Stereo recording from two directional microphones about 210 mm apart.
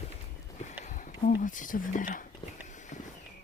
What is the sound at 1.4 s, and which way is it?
Speech, 40° left (ahead or behind).